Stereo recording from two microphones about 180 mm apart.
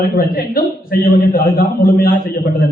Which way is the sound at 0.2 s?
55° left (ahead or behind).